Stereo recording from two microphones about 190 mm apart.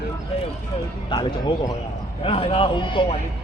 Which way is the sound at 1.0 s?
25° left (ahead or behind).